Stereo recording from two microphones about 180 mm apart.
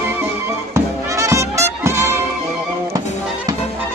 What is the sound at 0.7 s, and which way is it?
Music, 15° right (ahead or behind).